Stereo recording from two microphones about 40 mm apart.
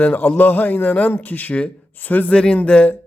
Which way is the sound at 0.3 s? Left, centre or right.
Left.